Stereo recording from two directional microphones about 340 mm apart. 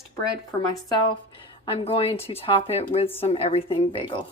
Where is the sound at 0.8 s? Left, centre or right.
Centre.